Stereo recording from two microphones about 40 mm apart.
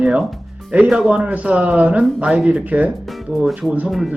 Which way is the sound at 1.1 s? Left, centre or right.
Right.